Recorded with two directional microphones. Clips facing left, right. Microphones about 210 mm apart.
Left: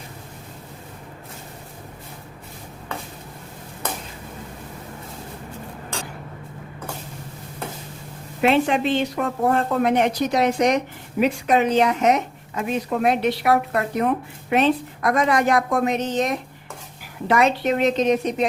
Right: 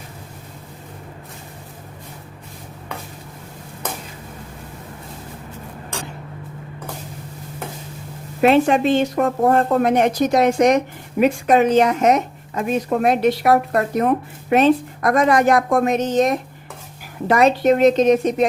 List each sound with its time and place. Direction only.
8.4 s speech: 45° right (ahead or behind)